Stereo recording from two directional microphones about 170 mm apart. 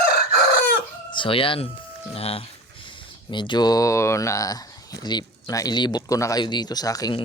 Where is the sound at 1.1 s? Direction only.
30° left (ahead or behind).